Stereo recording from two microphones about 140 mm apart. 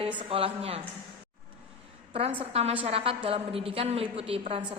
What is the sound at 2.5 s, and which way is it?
A woman's voice, 45° right (ahead or behind).